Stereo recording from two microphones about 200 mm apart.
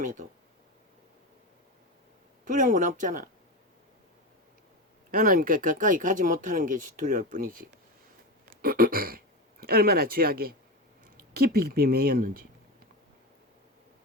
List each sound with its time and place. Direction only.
0.0 s speech: 40° right (ahead or behind)
2.4 s speech: 40° right (ahead or behind)
5.1 s speech: 45° right (ahead or behind)